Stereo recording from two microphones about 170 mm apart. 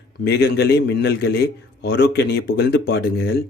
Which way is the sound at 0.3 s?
65° left (ahead or behind).